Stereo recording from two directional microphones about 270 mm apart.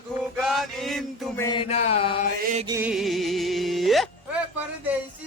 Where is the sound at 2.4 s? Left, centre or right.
Right.